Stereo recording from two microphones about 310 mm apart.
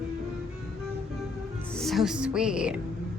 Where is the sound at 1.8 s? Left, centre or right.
Centre.